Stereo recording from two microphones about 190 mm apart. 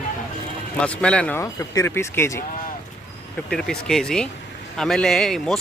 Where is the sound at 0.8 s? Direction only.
5° left (ahead or behind).